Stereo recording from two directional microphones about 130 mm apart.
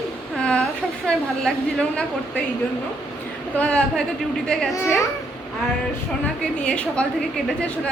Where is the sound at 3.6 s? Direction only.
10° left (ahead or behind).